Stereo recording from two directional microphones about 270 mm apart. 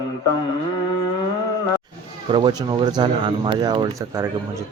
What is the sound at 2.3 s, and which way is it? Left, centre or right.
Speech, centre.